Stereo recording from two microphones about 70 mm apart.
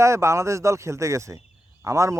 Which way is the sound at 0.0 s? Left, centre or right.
Right.